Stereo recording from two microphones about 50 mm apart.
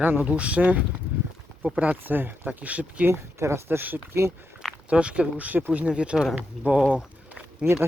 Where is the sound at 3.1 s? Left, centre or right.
Right.